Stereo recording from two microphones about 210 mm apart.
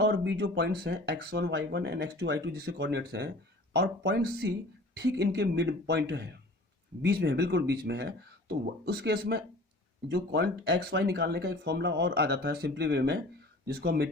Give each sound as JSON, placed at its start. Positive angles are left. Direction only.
{"t": 0.0, "sound": "speech", "side_deg": -55}